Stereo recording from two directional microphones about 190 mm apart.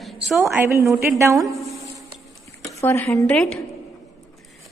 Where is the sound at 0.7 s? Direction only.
15° right (ahead or behind).